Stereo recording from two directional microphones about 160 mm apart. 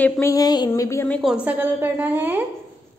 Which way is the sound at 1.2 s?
5° right (ahead or behind).